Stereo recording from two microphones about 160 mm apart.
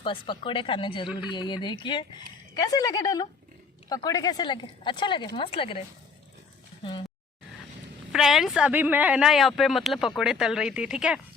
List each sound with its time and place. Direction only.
0.0 s speech: 30° left (ahead or behind)
8.1 s speech: centre (ahead or behind)